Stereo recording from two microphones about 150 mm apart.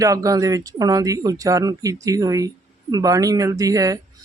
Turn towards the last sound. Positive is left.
turn(degrees=-25)  # may be behind; listen again after turning